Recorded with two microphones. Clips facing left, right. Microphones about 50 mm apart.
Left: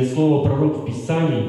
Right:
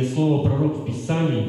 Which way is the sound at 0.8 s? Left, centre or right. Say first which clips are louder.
Left 3 dB; centre.